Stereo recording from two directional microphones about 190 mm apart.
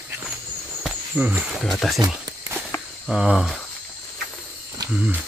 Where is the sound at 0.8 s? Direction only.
10° right (ahead or behind).